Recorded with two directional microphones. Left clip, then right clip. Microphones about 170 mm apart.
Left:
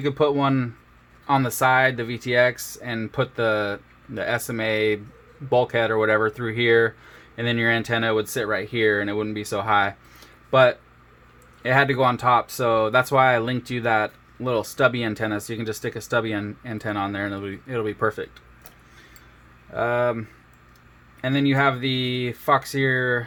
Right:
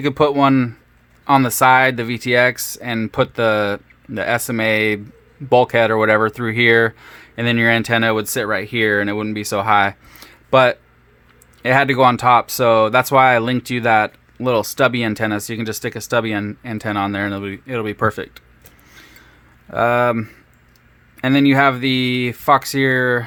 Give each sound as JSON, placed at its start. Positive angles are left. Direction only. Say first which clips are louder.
{"t": 0.0, "sound": "speech", "louder": "right 6 dB", "side_deg": -45}
{"t": 19.7, "sound": "speech", "louder": "right 7 dB", "side_deg": -55}